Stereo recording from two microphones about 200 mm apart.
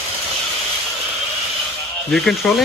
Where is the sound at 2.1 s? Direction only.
5° left (ahead or behind).